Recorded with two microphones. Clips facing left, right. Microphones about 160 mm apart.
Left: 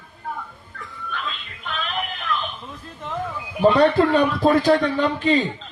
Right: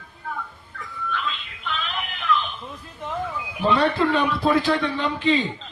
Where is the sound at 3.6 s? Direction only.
45° left (ahead or behind).